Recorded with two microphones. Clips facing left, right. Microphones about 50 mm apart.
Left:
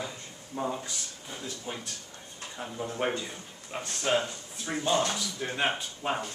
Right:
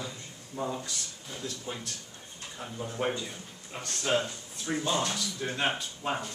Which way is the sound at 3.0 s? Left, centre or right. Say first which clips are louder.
Left 1 dB; left.